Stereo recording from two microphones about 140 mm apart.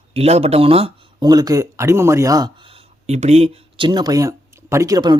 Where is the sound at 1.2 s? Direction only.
30° right (ahead or behind).